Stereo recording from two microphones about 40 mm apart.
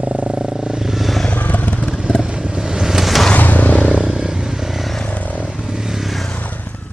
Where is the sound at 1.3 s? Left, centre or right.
Left.